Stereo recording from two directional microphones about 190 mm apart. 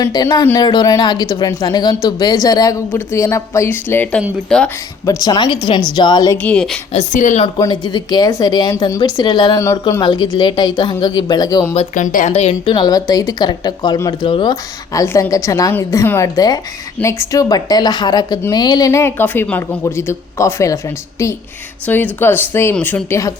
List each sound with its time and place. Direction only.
0.0 s a woman's voice: 20° left (ahead or behind); by 4.7 s 5° left (ahead or behind)
5.0 s a woman's voice: 20° left (ahead or behind)
6.3 s speech: 5° left (ahead or behind)
6.9 s a woman's voice: 40° left (ahead or behind)
7.4 s a woman's voice: 25° left (ahead or behind)
11.7 s a woman's voice: 35° left (ahead or behind); by 20.7 s 15° left (ahead or behind)
21.8 s speech: 10° left (ahead or behind)